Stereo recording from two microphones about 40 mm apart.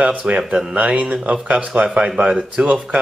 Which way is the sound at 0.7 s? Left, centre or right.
Right.